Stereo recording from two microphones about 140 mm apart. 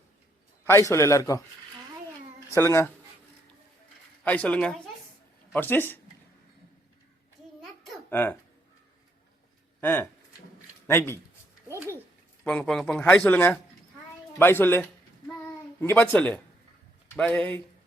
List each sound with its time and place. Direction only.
0.6 s a man's voice: 20° left (ahead or behind)
2.6 s a man's voice: 20° left (ahead or behind)
4.2 s speech: 10° left (ahead or behind)
8.1 s speech: 15° left (ahead or behind)
9.8 s speech: 15° left (ahead or behind)
12.5 s speech: 5° left (ahead or behind)